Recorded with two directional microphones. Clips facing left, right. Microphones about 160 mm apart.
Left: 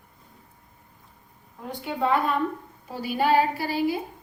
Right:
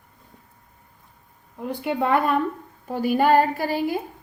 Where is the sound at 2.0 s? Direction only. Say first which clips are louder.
Right 2 dB; 55° right (ahead or behind).